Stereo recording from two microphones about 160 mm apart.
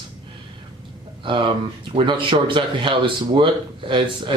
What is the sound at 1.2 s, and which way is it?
Speech, 30° right (ahead or behind).